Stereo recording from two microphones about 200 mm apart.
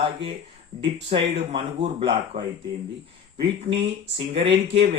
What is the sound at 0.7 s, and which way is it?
Speech, 40° right (ahead or behind).